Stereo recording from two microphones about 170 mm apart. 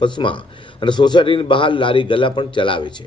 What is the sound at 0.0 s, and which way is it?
Speech, 30° left (ahead or behind).